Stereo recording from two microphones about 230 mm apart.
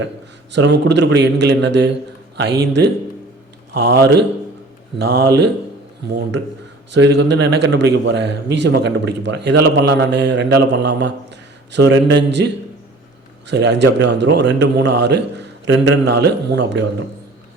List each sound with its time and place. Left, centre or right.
0.5 s a man's voice: right
4.0 s a man's voice: right
6.9 s a man's voice: right
13.5 s a man's voice: right